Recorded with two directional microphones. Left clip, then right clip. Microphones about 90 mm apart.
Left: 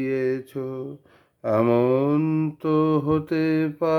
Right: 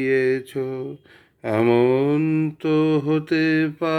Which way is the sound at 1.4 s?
25° left (ahead or behind).